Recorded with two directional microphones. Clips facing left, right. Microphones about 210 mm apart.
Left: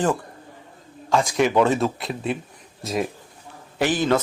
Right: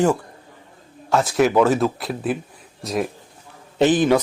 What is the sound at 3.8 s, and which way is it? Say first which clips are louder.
Speech: right 5 dB; 20° right (ahead or behind).